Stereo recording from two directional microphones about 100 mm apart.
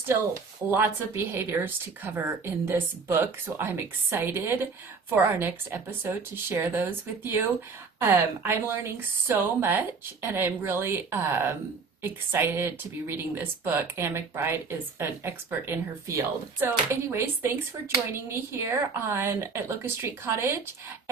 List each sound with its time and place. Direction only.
0.1 s speech: 20° right (ahead or behind)